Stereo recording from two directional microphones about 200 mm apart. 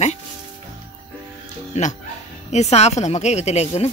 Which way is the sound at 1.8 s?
35° left (ahead or behind).